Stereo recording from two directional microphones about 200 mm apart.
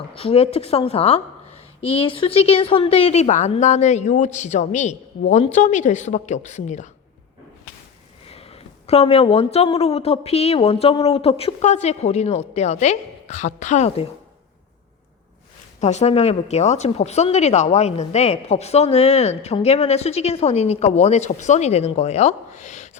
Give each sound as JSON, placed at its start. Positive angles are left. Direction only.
{"t": 0.1, "sound": "speech", "side_deg": 30}
{"t": 8.3, "sound": "speech", "side_deg": 30}
{"t": 15.8, "sound": "speech", "side_deg": 35}